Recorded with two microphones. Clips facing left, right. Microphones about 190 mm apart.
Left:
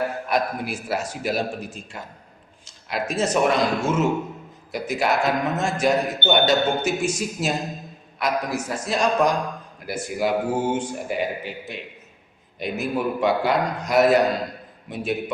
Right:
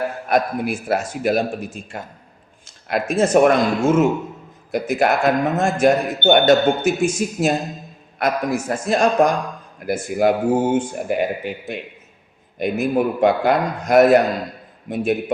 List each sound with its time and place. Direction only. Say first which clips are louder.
0.3 s a man's voice: right 9 dB; 50° right (ahead or behind)